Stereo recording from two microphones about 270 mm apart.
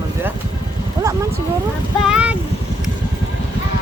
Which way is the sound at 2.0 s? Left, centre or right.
Centre.